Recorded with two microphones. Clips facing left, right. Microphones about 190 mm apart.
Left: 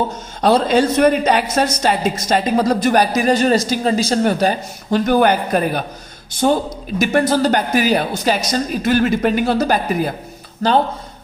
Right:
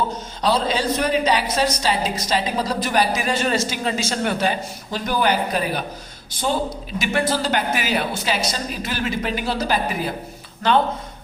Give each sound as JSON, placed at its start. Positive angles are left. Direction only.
{"t": 0.4, "sound": "a woman's voice", "side_deg": 50}
{"t": 4.9, "sound": "a woman's voice", "side_deg": 55}
{"t": 7.0, "sound": "a woman's voice", "side_deg": 45}
{"t": 10.6, "sound": "speech", "side_deg": 35}